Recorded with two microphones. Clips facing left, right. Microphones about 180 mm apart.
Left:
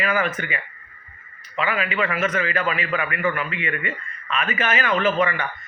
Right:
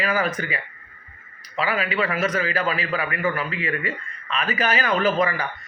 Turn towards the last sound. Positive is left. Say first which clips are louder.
# even
turn(degrees=-35)  # may be behind; listen again after turning